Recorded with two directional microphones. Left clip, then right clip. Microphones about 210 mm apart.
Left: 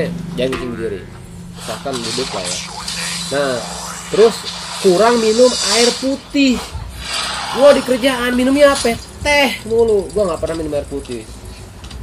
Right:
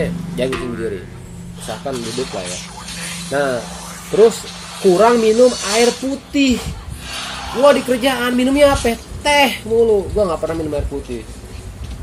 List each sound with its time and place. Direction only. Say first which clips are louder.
0.0 s a woman's voice: left 1 dB; centre (ahead or behind)
1.7 s speech: left 2 dB; 35° left (ahead or behind)
3.3 s speech: even; centre (ahead or behind)
3.5 s a sound: left 2 dB; 35° left (ahead or behind)
4.9 s a woman's voice: right 1 dB; centre (ahead or behind)
5.2 s speech: even; 35° left (ahead or behind)
5.6 s a woman's voice: left 1 dB; centre (ahead or behind)
6.5 s a sound: even; 35° left (ahead or behind)
7.9 s a woman's voice: left 1 dB; centre (ahead or behind)